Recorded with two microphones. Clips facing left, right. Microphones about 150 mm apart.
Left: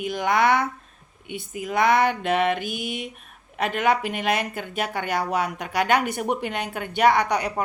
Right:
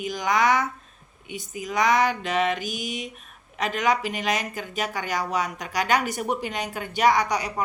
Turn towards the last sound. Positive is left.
turn(degrees=55)  # may be behind; listen again after turning